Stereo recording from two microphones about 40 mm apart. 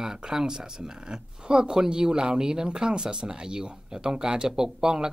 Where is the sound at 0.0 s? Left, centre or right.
Centre.